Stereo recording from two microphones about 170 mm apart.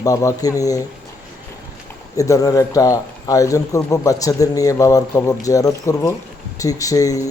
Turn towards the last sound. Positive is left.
turn(degrees=20)  # may be behind; listen again after turning